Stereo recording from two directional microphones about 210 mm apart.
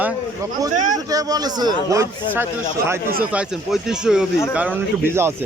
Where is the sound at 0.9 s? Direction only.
15° right (ahead or behind).